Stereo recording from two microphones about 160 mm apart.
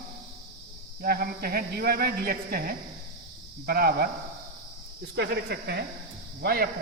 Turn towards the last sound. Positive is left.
turn(degrees=-85)